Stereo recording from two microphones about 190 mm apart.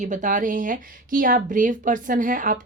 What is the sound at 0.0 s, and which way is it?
Speech, 40° right (ahead or behind).